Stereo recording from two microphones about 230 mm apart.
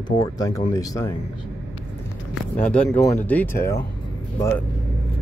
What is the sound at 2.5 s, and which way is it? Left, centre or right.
Speech, centre.